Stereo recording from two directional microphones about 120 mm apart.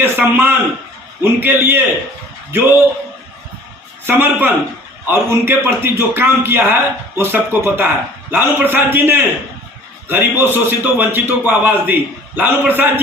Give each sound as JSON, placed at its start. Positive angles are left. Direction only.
{"t": 0.0, "sound": "a man's voice", "side_deg": -15}
{"t": 4.0, "sound": "a man's voice", "side_deg": -15}